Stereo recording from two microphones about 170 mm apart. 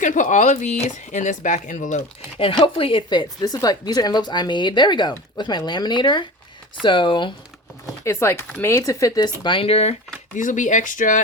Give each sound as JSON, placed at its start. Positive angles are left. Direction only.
{"t": 0.0, "sound": "speech", "side_deg": 50}
{"t": 2.4, "sound": "speech", "side_deg": 30}
{"t": 8.0, "sound": "speech", "side_deg": 15}
{"t": 10.3, "sound": "speech", "side_deg": 50}